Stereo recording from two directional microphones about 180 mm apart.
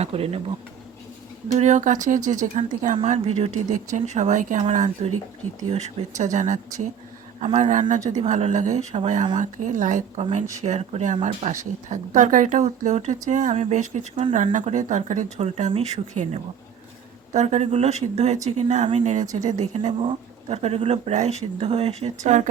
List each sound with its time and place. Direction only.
0.0 s speech: 35° right (ahead or behind)
1.5 s speech: 40° right (ahead or behind)